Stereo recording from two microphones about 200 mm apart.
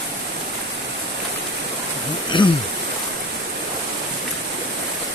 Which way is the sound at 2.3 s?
25° left (ahead or behind).